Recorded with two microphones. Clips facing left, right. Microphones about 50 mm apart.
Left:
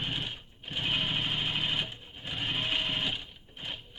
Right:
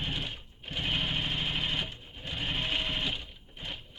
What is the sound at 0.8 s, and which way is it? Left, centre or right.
Sewing machine, centre.